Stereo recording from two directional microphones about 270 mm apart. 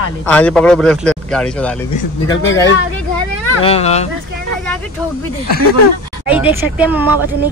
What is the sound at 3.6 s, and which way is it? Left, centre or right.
Speech, left.